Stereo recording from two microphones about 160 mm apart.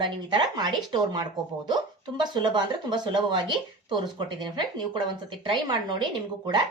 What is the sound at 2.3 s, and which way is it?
A woman's voice, 30° right (ahead or behind).